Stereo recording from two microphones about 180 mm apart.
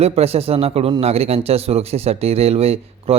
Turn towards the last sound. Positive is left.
turn(degrees=-35)  # may be behind; listen again after turning